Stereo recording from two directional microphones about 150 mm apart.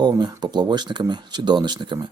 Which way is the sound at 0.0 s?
25° right (ahead or behind).